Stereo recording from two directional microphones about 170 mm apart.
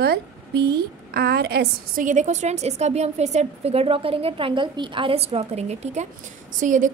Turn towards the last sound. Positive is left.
turn(degrees=-50)  # may be behind; listen again after turning